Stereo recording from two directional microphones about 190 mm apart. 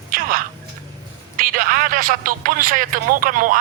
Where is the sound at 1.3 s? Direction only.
50° right (ahead or behind).